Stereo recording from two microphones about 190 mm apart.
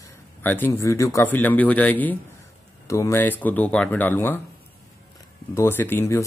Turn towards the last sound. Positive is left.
turn(degrees=15)  # may be behind; listen again after turning